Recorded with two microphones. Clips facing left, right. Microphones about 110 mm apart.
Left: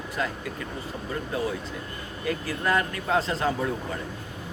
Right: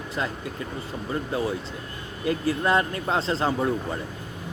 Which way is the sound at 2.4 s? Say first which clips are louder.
Right 3 dB; 25° right (ahead or behind).